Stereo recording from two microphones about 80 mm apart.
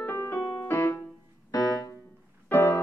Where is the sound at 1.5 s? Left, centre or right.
Left.